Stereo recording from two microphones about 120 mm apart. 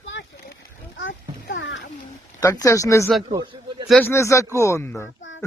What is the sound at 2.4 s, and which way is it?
Speech, 25° left (ahead or behind).